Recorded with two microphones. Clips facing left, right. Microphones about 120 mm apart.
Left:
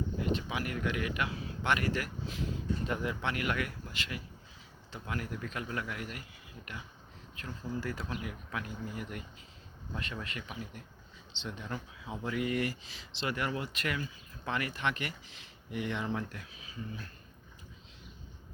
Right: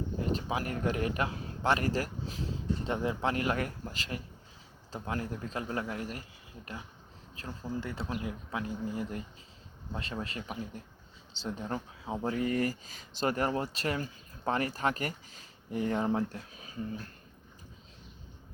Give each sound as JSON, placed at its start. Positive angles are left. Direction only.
{"t": 0.2, "sound": "speech", "side_deg": -35}
{"t": 7.4, "sound": "speech", "side_deg": -35}